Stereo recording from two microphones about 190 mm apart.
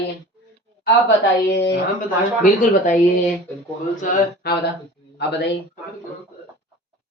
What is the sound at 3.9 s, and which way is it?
Speech, 50° left (ahead or behind).